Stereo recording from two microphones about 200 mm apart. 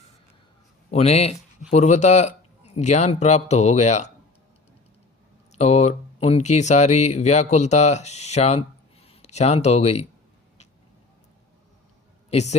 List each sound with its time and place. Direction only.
0.9 s speech: 30° left (ahead or behind)
5.5 s speech: 35° left (ahead or behind)
12.3 s speech: 35° left (ahead or behind)